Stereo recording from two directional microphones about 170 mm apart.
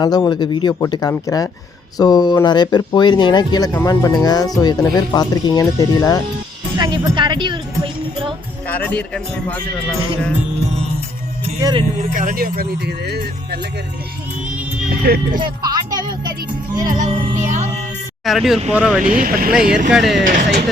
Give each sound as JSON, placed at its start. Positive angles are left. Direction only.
{"t": 0.0, "sound": "speech", "side_deg": 25}
{"t": 6.7, "sound": "speech", "side_deg": -25}
{"t": 8.6, "sound": "a man's voice", "side_deg": 10}
{"t": 11.6, "sound": "speech", "side_deg": -30}
{"t": 11.9, "sound": "speech", "side_deg": -50}
{"t": 15.0, "sound": "speech", "side_deg": -60}
{"t": 15.4, "sound": "music", "side_deg": -25}
{"t": 16.9, "sound": "music", "side_deg": -45}
{"t": 18.3, "sound": "speech", "side_deg": 0}
{"t": 19.2, "sound": "speech", "side_deg": -55}
{"t": 19.5, "sound": "speech", "side_deg": -5}